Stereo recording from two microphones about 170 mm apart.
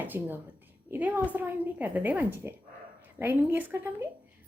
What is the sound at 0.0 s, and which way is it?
A woman's voice, 10° right (ahead or behind).